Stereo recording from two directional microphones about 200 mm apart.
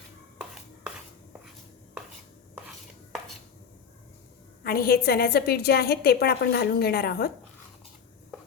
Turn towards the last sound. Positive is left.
turn(degrees=50)  # may be behind; listen again after turning